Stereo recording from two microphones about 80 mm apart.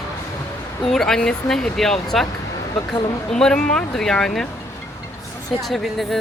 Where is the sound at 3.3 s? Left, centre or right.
Centre.